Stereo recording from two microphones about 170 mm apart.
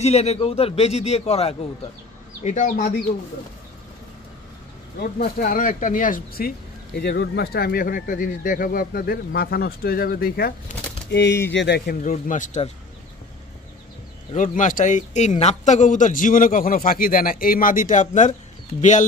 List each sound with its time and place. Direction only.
0.0 s a man's voice: 40° left (ahead or behind)
2.4 s a man's voice: 50° left (ahead or behind)
5.0 s speech: 55° left (ahead or behind)
7.0 s speech: 75° left (ahead or behind)
11.1 s a man's voice: 85° left; by 12.7 s 45° left (ahead or behind)
14.3 s a man's voice: 50° left (ahead or behind)